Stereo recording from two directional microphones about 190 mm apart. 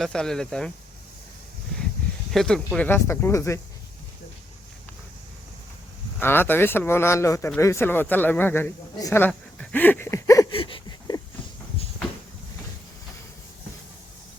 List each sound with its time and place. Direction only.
0.0 s speech: 5° left (ahead or behind)
2.3 s speech: centre (ahead or behind)
6.1 s speech: 10° left (ahead or behind)
10.6 s a sound: 25° left (ahead or behind)